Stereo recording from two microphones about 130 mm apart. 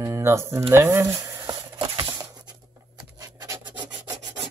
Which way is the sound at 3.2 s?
30° right (ahead or behind).